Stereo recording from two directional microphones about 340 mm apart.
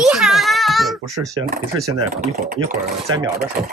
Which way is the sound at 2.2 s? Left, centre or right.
Right.